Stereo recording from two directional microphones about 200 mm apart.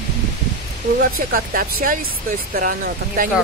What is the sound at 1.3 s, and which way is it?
Speech, 45° right (ahead or behind).